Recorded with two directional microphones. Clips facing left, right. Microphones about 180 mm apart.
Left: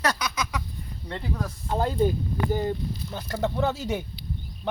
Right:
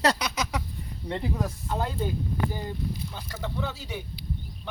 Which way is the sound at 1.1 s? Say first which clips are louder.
Right 2 dB; 10° right (ahead or behind).